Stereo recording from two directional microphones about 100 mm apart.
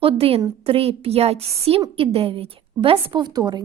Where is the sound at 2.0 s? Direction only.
70° right (ahead or behind).